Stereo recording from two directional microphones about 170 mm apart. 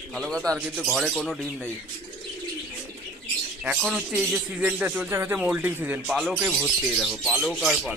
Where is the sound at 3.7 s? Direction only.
5° right (ahead or behind).